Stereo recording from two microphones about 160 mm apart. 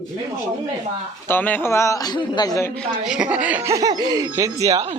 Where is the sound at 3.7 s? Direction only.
25° right (ahead or behind).